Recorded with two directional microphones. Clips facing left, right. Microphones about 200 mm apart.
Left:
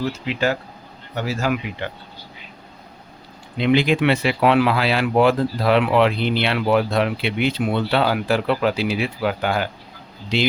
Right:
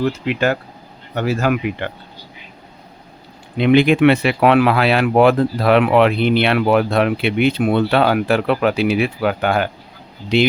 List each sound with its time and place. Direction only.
0.0 s speech: 55° right (ahead or behind)
3.6 s speech: 55° right (ahead or behind)